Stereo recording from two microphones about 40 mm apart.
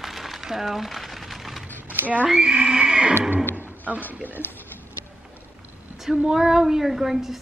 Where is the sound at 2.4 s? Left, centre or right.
Right.